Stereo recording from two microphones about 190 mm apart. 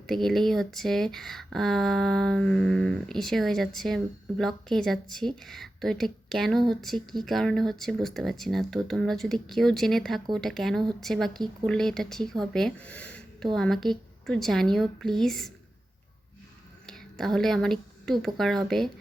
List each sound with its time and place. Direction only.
0.1 s speech: centre (ahead or behind)
16.8 s a woman's voice: centre (ahead or behind)